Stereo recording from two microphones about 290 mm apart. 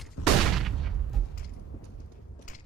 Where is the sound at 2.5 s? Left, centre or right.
Left.